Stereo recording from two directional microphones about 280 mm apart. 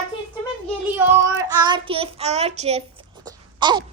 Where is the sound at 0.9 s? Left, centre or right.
Centre.